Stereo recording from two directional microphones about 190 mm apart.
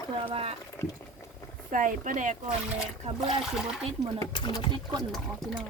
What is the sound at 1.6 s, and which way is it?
Speech, 45° right (ahead or behind).